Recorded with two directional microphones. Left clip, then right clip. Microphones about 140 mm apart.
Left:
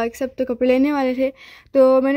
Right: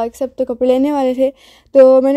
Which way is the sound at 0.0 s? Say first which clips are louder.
Right 4 dB; 35° right (ahead or behind).